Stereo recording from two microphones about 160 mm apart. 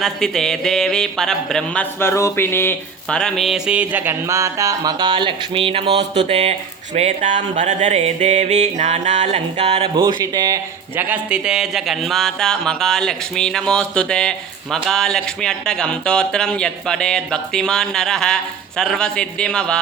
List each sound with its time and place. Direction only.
0.0 s a man's voice: 5° left (ahead or behind); by 9.9 s 40° right (ahead or behind)
9.9 s a man's voice: 20° right (ahead or behind); by 19.8 s 5° left (ahead or behind)